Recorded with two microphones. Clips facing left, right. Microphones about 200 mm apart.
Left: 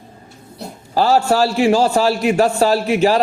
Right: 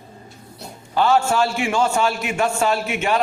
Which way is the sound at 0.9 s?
35° left (ahead or behind).